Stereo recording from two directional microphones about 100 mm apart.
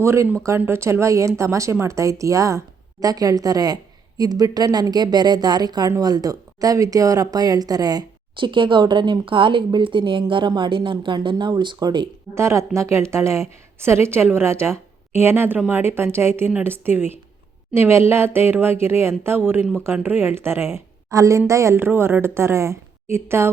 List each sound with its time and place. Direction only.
0.0 s a woman's voice: 25° right (ahead or behind); by 12.0 s 50° right (ahead or behind)
12.3 s a woman's voice: 30° right (ahead or behind)